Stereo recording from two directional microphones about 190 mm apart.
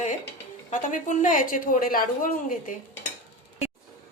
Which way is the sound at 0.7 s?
40° left (ahead or behind).